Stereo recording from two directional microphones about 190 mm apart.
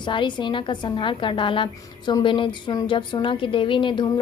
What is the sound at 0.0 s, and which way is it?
A woman's voice, 25° left (ahead or behind).